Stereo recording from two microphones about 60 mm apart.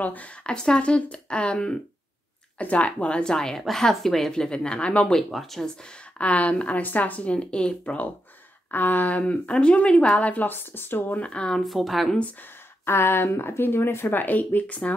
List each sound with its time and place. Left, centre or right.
0.0 s a woman's voice: left
5.1 s speech: centre
6.1 s speech: left
8.7 s speech: left
11.6 s speech: centre
12.8 s speech: left
14.2 s speech: left